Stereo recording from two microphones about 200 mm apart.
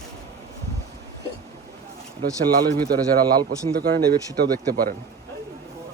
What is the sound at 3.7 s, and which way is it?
Speech, 50° right (ahead or behind).